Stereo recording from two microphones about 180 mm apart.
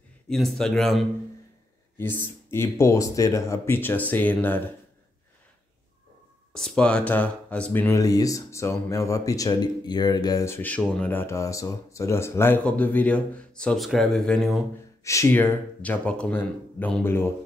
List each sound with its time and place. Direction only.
0.3 s speech: centre (ahead or behind)
6.5 s speech: 5° left (ahead or behind)
15.0 s speech: 15° left (ahead or behind)